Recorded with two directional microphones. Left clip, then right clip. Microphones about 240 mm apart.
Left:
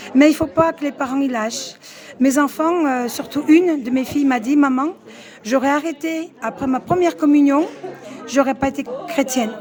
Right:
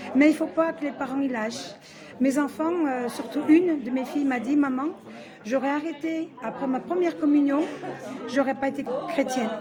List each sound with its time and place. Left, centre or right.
0.2 s speech: left